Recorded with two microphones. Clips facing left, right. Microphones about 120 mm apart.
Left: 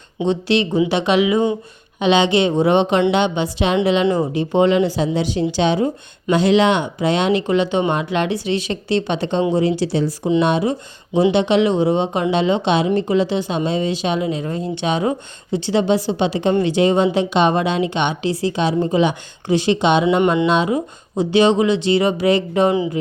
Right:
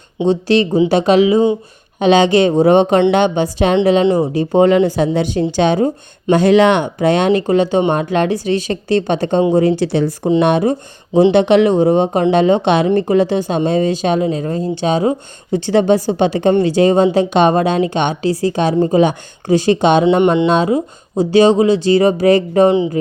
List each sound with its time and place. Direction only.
0.3 s a woman's voice: 40° right (ahead or behind)
15.5 s a woman's voice: 50° right (ahead or behind)
20.1 s a sound: 25° right (ahead or behind)
20.5 s speech: 35° right (ahead or behind)